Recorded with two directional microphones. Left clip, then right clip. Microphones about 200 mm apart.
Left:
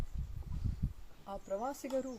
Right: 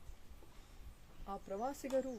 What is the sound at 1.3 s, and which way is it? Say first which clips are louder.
Speech: left 3 dB; 5° right (ahead or behind).